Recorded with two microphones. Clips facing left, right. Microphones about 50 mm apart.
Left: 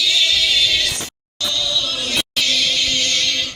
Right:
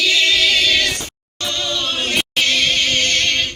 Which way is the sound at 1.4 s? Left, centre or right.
Right.